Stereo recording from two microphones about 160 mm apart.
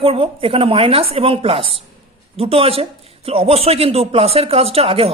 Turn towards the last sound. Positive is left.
turn(degrees=-40)  # may be behind; listen again after turning